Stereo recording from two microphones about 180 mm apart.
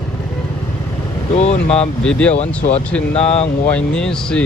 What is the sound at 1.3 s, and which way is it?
Speech, 40° left (ahead or behind).